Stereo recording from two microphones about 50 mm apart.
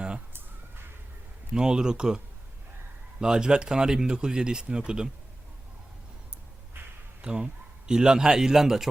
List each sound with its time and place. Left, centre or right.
1.5 s speech: centre
7.2 s a man's voice: right